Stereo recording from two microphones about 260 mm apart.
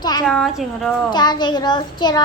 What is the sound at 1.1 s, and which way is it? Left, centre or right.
A child's voice, centre.